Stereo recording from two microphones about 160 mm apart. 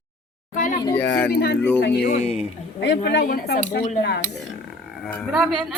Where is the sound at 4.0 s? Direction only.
90° left.